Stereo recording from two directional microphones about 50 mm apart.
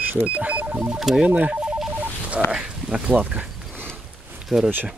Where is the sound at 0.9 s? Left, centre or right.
Centre.